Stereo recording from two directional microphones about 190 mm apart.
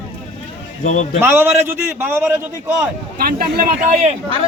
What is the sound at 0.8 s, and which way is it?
Speech, 40° left (ahead or behind).